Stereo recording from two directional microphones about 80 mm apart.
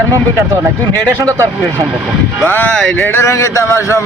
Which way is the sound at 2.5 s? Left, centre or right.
Left.